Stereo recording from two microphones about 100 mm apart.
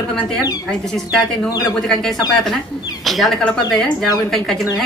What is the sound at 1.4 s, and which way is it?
Speech, 35° left (ahead or behind).